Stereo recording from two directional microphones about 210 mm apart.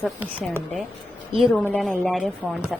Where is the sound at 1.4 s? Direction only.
5° left (ahead or behind).